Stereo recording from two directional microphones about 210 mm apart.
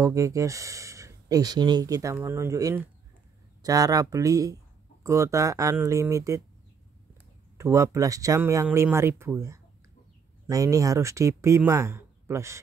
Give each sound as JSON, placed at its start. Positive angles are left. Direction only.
{"t": 0.0, "sound": "speech", "side_deg": -15}
{"t": 7.5, "sound": "speech", "side_deg": -15}